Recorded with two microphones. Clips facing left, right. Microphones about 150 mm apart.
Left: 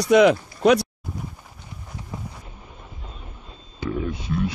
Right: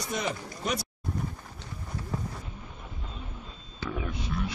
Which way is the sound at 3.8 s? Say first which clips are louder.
Left 7 dB; 15° left (ahead or behind).